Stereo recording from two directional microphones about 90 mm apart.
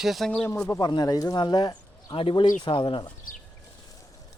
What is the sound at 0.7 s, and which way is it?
Speech, 50° left (ahead or behind).